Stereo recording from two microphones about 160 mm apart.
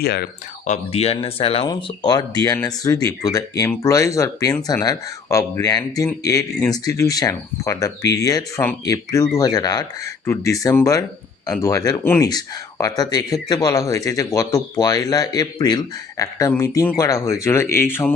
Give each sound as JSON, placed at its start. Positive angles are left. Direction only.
{"t": 0.0, "sound": "speech", "side_deg": 90}
{"t": 0.6, "sound": "speech", "side_deg": 45}
{"t": 1.6, "sound": "speech", "side_deg": 25}